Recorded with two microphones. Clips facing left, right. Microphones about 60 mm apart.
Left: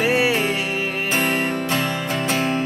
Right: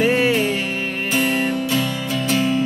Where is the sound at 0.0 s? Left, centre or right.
Centre.